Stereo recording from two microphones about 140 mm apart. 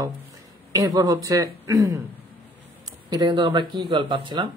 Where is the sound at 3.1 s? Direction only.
30° right (ahead or behind).